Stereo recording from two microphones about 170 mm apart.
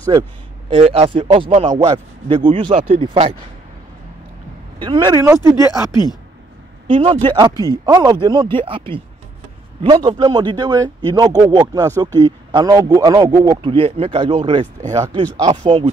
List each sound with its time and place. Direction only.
0.7 s speech: 35° right (ahead or behind)
1.8 s speech: 25° right (ahead or behind)
4.8 s a man's voice: 25° right (ahead or behind)
6.9 s a man's voice: 35° right (ahead or behind)